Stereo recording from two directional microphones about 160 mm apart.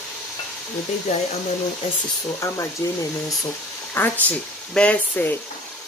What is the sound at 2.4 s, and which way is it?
Speech, 20° left (ahead or behind).